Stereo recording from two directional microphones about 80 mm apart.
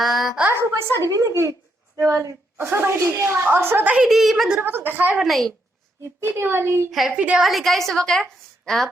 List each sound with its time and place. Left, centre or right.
0.0 s a sound: centre
0.5 s a woman's voice: right
3.9 s a woman's voice: centre
4.6 s a woman's voice: right
5.2 s a woman's voice: centre
6.1 s a woman's voice: right
7.1 s a woman's voice: centre
7.4 s a woman's voice: centre